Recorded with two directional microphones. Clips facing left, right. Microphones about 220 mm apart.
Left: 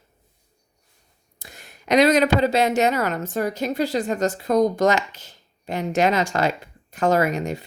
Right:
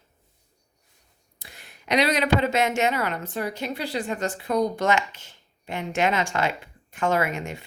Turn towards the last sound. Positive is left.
turn(degrees=40)  # may be behind; listen again after turning